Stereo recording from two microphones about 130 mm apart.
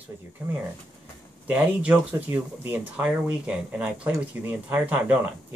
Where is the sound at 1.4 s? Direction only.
10° right (ahead or behind).